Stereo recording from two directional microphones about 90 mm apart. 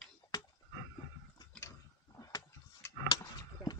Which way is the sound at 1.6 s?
35° left (ahead or behind).